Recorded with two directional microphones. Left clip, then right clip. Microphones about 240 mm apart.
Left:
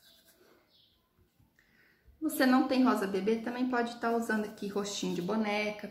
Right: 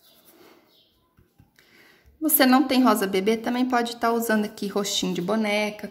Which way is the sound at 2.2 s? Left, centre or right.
Right.